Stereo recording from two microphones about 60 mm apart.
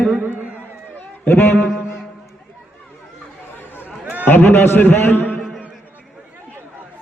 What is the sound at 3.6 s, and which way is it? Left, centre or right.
Chatter, left.